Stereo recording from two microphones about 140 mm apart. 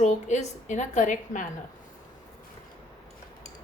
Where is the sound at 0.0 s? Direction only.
55° left (ahead or behind).